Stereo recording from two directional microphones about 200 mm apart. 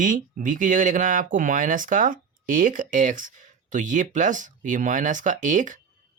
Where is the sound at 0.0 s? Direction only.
40° right (ahead or behind).